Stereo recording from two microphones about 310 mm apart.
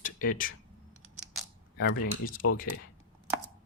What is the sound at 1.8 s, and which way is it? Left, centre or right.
Speech, left.